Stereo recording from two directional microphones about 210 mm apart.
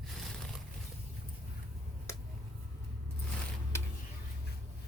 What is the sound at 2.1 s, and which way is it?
Finger snapping, 15° left (ahead or behind).